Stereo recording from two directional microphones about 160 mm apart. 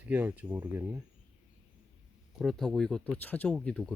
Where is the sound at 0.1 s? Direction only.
10° right (ahead or behind).